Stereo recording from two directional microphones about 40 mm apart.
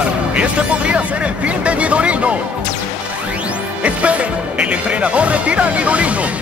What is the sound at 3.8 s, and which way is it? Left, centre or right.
Speech, right.